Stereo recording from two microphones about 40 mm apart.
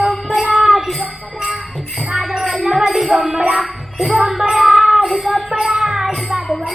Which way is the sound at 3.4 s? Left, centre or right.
Centre.